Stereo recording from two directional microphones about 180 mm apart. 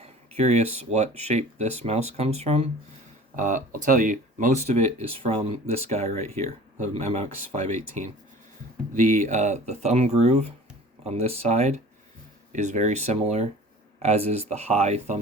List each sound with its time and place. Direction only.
0.0 s speech: 35° right (ahead or behind)